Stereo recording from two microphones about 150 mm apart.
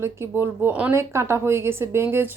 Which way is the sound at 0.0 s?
15° right (ahead or behind).